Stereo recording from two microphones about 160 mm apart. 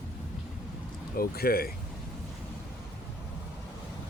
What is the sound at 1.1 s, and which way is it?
Speech, 70° left (ahead or behind).